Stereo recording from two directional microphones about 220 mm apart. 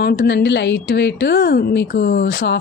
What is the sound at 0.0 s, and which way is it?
A woman's voice, 50° left (ahead or behind).